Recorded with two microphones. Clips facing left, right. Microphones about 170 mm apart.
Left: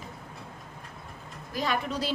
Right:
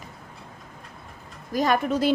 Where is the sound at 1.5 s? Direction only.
45° right (ahead or behind).